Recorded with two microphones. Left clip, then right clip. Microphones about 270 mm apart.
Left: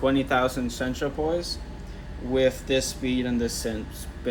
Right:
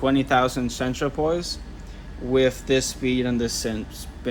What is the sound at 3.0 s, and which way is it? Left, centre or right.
Speech, right.